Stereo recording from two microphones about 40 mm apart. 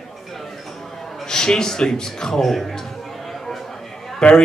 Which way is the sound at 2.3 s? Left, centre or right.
Centre.